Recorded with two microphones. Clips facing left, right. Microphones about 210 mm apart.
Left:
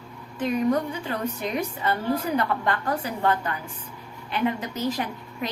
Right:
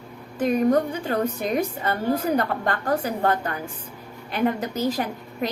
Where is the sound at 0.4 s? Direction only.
45° right (ahead or behind).